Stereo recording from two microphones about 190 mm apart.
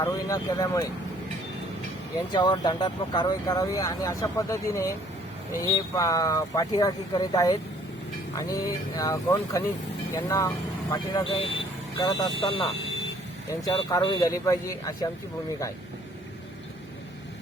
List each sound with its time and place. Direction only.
0.0 s speech: 20° left (ahead or behind)
2.3 s speech: 25° left (ahead or behind)
13.7 s speech: 20° left (ahead or behind)